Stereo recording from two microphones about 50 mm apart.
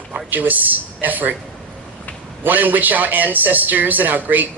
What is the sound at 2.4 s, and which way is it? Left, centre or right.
Speech, right.